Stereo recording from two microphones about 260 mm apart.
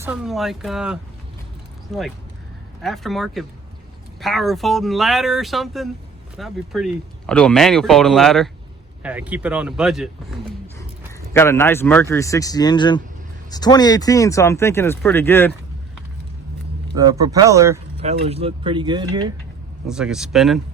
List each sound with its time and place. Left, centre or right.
0.0 s speech: centre
11.3 s speech: centre
16.9 s speech: centre
18.0 s speech: right
19.9 s speech: centre